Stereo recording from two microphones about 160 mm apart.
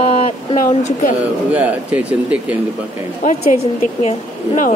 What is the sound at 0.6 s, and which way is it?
Speech, 55° left (ahead or behind).